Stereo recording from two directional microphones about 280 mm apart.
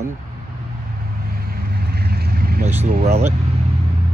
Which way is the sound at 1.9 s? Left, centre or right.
Right.